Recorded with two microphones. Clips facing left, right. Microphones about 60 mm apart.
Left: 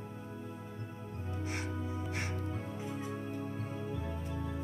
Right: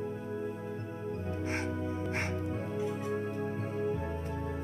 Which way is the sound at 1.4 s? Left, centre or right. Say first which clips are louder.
Right 4 dB; right.